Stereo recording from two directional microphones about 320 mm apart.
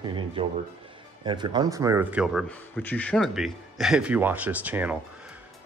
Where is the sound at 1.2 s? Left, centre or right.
Centre.